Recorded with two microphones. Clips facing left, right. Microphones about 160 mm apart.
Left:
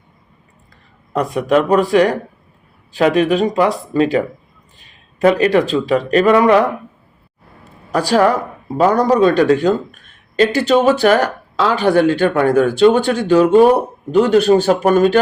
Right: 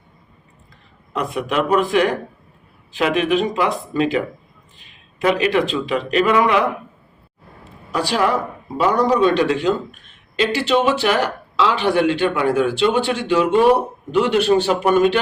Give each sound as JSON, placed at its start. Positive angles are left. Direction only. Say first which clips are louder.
{"t": 1.1, "sound": "speech", "louder": "left 6 dB", "side_deg": 40}
{"t": 5.2, "sound": "speech", "louder": "left 5 dB", "side_deg": 40}
{"t": 7.9, "sound": "speech", "louder": "left 5 dB", "side_deg": 45}